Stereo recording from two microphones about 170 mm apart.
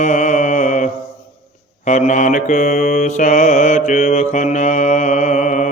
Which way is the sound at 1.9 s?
45° left (ahead or behind).